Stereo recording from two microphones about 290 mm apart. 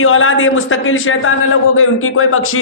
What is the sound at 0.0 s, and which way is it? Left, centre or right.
Speech, left.